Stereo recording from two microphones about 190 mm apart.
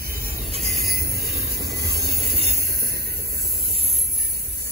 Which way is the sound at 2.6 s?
55° right (ahead or behind).